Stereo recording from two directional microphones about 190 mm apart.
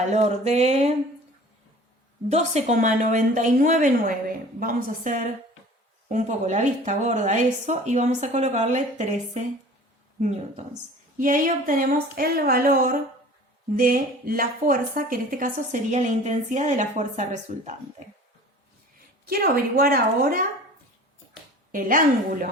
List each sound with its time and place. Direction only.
0.1 s speech: 35° right (ahead or behind)
2.3 s speech: 35° right (ahead or behind)
19.3 s speech: 50° right (ahead or behind)
21.7 s speech: 45° right (ahead or behind)